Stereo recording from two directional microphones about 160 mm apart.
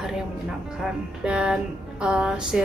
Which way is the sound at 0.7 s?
5° right (ahead or behind).